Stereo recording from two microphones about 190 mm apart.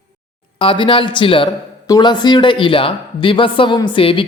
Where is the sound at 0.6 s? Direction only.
25° left (ahead or behind).